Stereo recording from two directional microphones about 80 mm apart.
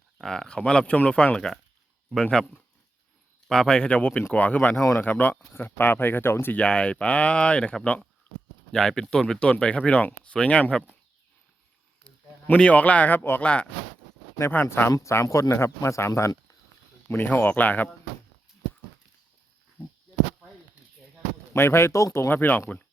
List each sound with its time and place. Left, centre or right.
0.2 s speech: centre; by 6.6 s left
6.6 s speech: centre
8.3 s a sound: centre
8.7 s speech: centre
12.0 s speech: centre
13.4 s speech: centre
14.5 s speech: left
17.1 s speech: left
21.5 s speech: left
22.3 s speech: left